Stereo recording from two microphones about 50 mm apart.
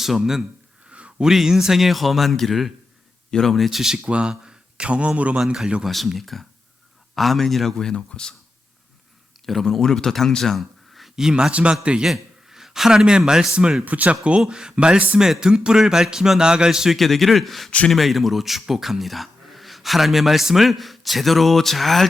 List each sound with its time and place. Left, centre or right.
0.0 s speech: centre
0.9 s a sound: right
1.2 s speech: centre
3.9 s speech: right
5.5 s speech: centre
5.8 s speech: centre
7.9 s speech: centre
9.5 s a man's voice: centre
11.2 s speech: centre
12.0 s a man's voice: centre
13.8 s speech: right; by 17.0 s centre
17.0 s speech: centre